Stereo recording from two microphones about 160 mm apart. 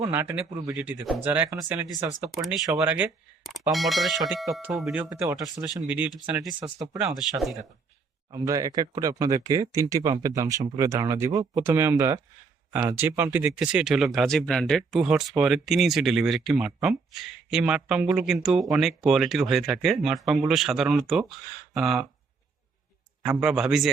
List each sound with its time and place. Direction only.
0.0 s speech: 15° right (ahead or behind)
2.3 s speech: centre (ahead or behind)
3.7 s speech: centre (ahead or behind)
6.6 s speech: 25° right (ahead or behind)
7.2 s speech: centre (ahead or behind)
8.3 s speech: 20° right (ahead or behind); by 22.0 s centre (ahead or behind)
23.4 s speech: 5° right (ahead or behind)